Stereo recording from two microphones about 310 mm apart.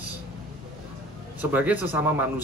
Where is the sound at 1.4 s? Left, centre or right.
Centre.